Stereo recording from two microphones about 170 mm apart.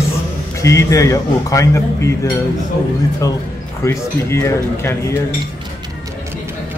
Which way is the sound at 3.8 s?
15° left (ahead or behind).